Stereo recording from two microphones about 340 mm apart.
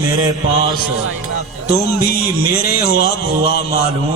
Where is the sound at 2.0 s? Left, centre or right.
Left.